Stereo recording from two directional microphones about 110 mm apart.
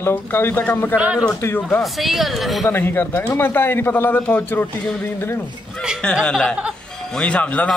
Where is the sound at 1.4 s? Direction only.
20° left (ahead or behind).